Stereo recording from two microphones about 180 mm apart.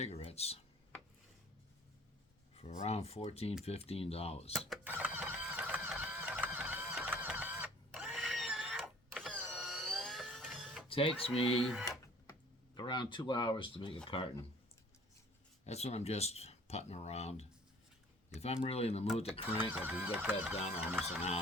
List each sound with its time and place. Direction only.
0.0 s speech: 35° left (ahead or behind)
2.6 s speech: 35° left (ahead or behind)
4.8 s printer: 10° right (ahead or behind)
10.8 s speech: 30° left (ahead or behind)
11.6 s speech: centre (ahead or behind)
12.7 s speech: 25° left (ahead or behind)
15.6 s speech: 35° left (ahead or behind)
19.5 s speech: 10° right (ahead or behind)